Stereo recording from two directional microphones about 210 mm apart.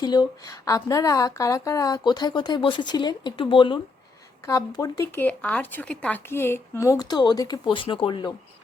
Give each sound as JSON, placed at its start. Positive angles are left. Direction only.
{"t": 0.0, "sound": "speech", "side_deg": 20}